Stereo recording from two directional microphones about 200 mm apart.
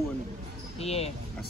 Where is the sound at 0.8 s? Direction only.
30° left (ahead or behind).